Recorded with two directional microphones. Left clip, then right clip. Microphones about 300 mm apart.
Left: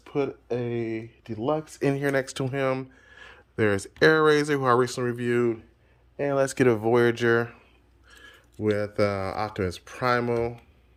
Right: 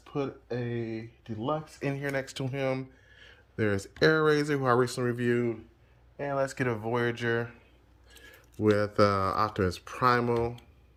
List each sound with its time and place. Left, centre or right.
0.0 s speech: centre
6.1 s speech: left
8.2 s speech: centre